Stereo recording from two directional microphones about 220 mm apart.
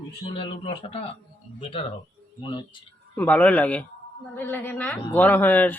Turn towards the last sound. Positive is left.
turn(degrees=10)  # may be behind; listen again after turning